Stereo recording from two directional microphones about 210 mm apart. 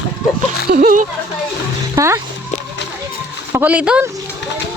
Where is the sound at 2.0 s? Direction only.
15° right (ahead or behind).